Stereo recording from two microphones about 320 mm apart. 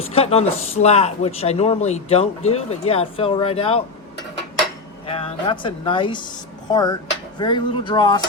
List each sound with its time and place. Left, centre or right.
0.0 s speech: centre
5.1 s speech: centre